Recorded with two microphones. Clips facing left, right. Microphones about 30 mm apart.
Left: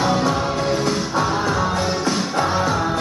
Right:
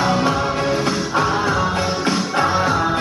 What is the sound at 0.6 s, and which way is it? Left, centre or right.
Music, right.